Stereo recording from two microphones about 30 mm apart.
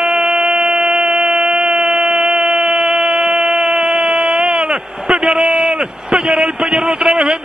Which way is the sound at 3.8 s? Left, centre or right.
Right.